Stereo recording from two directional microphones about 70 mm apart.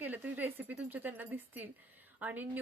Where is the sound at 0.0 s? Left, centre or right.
Right.